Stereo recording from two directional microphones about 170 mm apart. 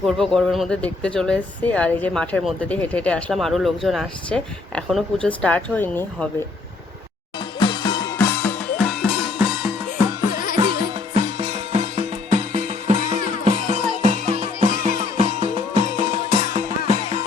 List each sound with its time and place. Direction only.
0.0 s speech: 5° left (ahead or behind)
7.3 s music: 25° left (ahead or behind); by 9.7 s 5° right (ahead or behind)
10.5 s music: 30° right (ahead or behind)